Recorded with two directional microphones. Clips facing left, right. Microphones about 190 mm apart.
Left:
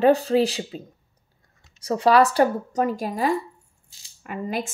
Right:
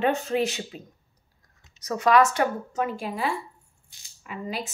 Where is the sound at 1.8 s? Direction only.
30° left (ahead or behind).